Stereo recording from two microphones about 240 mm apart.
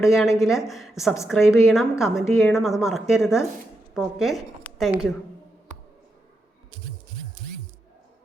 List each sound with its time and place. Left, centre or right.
0.0 s a woman's voice: centre